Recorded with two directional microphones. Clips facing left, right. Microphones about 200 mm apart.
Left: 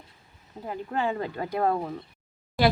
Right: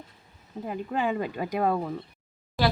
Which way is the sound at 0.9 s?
15° right (ahead or behind).